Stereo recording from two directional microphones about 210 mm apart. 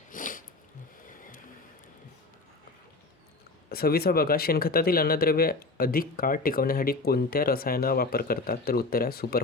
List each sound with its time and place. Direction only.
0.1 s snort: 40° left (ahead or behind)
3.7 s speech: 45° left (ahead or behind)